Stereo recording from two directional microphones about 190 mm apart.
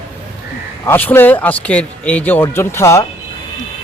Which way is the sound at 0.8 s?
10° left (ahead or behind).